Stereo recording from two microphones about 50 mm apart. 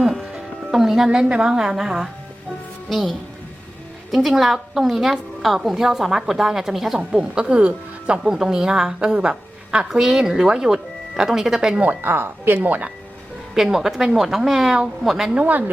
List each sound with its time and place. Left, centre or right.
0.0 s music: centre
0.8 s a woman's voice: centre
2.9 s a woman's voice: centre
7.2 s a woman's voice: centre
8.2 s a woman's voice: centre
12.0 s a woman's voice: right
13.5 s a woman's voice: centre
15.4 s speech: right